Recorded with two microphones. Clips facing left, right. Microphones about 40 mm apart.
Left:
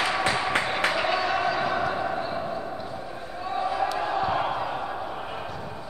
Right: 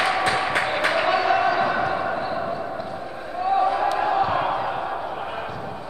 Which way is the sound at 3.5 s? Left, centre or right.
Centre.